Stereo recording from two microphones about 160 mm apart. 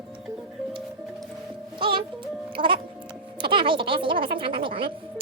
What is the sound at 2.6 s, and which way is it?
Speech, 30° right (ahead or behind).